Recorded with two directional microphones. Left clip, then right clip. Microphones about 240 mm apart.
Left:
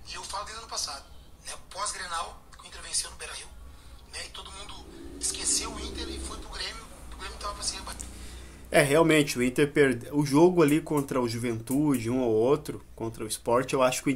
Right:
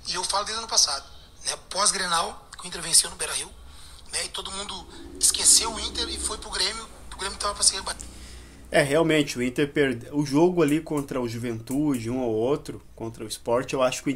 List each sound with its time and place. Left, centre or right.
0.1 s a man's voice: right
8.6 s speech: centre